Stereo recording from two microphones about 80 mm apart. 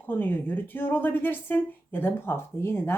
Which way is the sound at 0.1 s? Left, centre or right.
Left.